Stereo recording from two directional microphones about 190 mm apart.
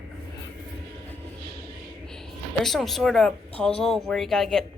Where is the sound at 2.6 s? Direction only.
Centre (ahead or behind).